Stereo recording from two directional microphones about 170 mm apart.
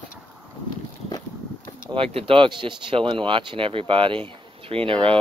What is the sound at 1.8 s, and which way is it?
Speech, 30° right (ahead or behind).